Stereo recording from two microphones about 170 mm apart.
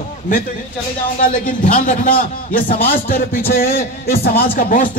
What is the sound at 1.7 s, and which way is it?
A man's voice, 50° left (ahead or behind).